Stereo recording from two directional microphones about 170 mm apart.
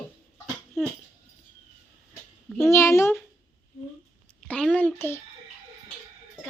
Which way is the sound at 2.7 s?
15° left (ahead or behind).